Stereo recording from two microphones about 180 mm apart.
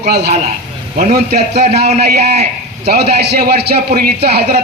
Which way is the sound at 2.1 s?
35° right (ahead or behind).